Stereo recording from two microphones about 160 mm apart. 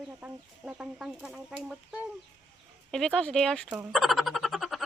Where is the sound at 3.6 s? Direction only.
10° right (ahead or behind).